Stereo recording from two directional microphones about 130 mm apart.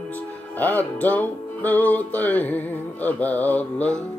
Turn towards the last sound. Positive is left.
turn(degrees=10)  # may be behind; listen again after turning